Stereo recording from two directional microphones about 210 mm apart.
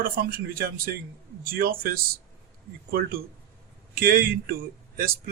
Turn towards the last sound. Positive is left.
turn(degrees=-45)  # may be behind; listen again after turning